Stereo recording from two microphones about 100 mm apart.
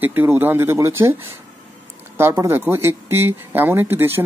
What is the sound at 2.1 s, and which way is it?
Speech, 25° right (ahead or behind).